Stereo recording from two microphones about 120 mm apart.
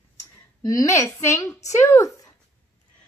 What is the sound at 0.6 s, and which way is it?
A woman's voice, 30° left (ahead or behind).